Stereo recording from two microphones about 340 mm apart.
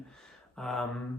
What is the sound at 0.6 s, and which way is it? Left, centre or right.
Speech, centre.